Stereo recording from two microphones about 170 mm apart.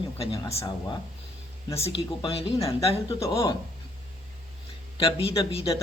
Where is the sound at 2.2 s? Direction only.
35° left (ahead or behind).